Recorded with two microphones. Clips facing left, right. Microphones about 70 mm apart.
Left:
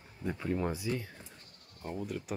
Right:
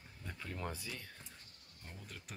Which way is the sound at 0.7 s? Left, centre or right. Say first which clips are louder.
Left 12 dB; centre.